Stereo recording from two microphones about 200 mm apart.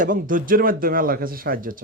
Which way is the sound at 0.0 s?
45° right (ahead or behind).